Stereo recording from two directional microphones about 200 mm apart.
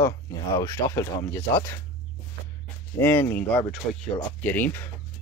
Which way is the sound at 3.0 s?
10° left (ahead or behind).